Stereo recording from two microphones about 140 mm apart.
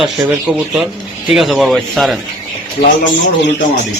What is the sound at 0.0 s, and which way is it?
Speech, centre (ahead or behind).